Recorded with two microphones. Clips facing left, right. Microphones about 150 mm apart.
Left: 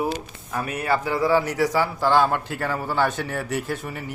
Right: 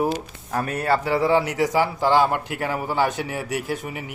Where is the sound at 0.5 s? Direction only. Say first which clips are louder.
Right 2 dB; 40° right (ahead or behind); by 4.1 s 15° right (ahead or behind).